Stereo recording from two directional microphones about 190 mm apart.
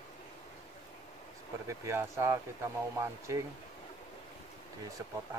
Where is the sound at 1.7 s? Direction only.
15° right (ahead or behind).